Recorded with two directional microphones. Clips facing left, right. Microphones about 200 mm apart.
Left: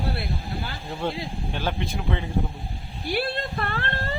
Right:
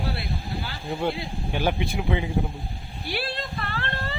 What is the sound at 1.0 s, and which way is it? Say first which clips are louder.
A man's voice: even; 10° right (ahead or behind).